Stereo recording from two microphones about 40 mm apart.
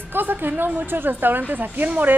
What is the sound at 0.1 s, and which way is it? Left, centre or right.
A woman's voice, right.